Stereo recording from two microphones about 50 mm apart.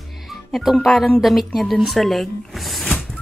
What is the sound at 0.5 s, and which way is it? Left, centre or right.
A woman's voice, centre.